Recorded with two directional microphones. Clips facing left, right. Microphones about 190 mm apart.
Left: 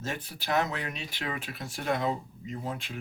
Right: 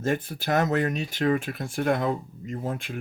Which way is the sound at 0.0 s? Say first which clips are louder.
Right 9 dB; 50° right (ahead or behind).